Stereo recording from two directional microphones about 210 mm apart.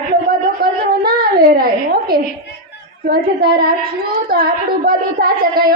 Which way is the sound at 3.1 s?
45° right (ahead or behind).